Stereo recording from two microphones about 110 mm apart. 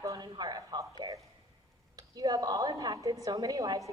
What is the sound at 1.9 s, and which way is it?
A woman's voice, 35° right (ahead or behind).